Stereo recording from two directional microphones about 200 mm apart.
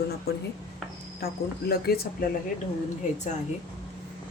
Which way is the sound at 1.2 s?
50° left (ahead or behind).